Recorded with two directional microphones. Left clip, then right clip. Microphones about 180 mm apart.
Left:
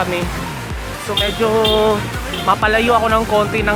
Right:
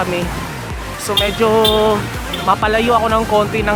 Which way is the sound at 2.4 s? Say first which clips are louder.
Even; centre (ahead or behind).